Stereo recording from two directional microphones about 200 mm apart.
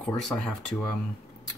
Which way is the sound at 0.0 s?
5° left (ahead or behind).